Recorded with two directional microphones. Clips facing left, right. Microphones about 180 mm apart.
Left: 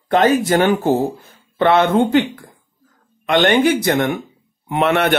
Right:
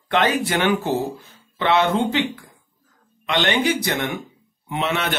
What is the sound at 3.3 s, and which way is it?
A man's voice, 50° left (ahead or behind).